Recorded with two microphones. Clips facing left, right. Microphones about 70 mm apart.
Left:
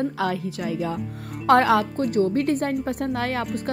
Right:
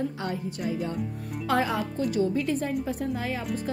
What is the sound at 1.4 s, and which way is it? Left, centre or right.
Speech, left.